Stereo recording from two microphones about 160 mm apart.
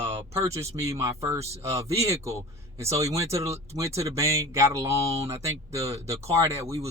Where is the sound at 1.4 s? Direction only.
40° right (ahead or behind).